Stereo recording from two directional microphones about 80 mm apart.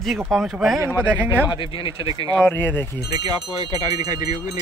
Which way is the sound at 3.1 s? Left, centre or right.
Right.